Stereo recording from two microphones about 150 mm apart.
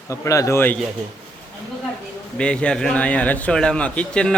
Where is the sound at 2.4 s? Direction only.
5° left (ahead or behind).